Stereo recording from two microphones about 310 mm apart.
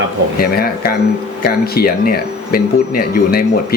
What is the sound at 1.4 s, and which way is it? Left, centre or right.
Speech, left.